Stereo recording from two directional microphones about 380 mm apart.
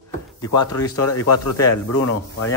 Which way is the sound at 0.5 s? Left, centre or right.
Left.